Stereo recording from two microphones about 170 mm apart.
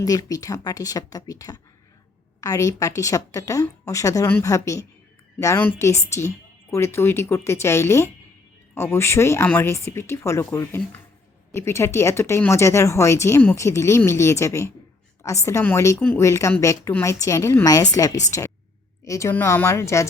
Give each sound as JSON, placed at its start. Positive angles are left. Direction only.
{"t": 0.0, "sound": "a woman's voice", "side_deg": 20}